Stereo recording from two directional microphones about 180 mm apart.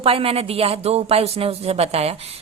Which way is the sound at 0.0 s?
35° right (ahead or behind).